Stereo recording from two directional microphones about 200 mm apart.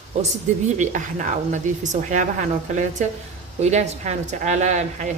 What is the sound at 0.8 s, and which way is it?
A woman's voice, 40° right (ahead or behind).